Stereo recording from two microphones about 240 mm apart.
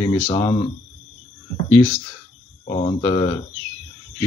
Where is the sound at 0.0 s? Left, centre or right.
Centre.